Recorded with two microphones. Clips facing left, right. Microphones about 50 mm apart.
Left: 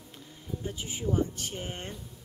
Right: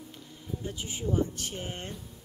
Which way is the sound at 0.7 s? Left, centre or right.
Left.